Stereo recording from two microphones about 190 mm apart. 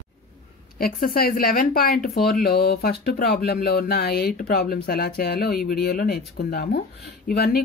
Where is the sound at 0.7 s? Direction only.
50° left (ahead or behind).